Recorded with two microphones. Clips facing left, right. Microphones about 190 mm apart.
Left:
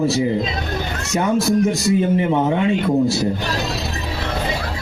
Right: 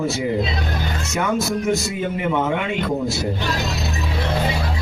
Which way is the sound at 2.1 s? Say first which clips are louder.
Left 4 dB; 30° left (ahead or behind).